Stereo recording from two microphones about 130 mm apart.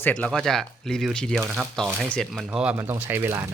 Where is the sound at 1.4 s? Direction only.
10° right (ahead or behind).